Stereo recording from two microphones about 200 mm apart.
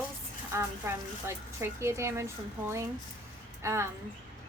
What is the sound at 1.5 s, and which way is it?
Speech, 15° right (ahead or behind).